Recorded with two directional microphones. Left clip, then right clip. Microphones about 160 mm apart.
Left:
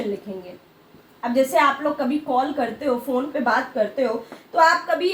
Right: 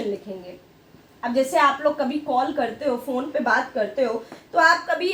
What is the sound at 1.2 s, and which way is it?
A woman's voice, 15° right (ahead or behind).